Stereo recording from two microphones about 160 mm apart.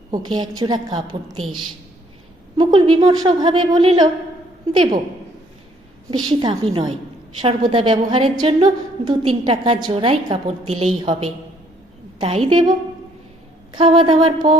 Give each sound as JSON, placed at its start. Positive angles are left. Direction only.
{"t": 0.1, "sound": "a woman's voice", "side_deg": -25}
{"t": 2.6, "sound": "a woman's voice", "side_deg": -30}
{"t": 6.1, "sound": "a woman's voice", "side_deg": -30}
{"t": 12.5, "sound": "a woman's voice", "side_deg": -30}
{"t": 13.7, "sound": "a woman's voice", "side_deg": -35}